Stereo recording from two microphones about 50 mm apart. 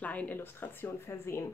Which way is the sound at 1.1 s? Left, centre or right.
Left.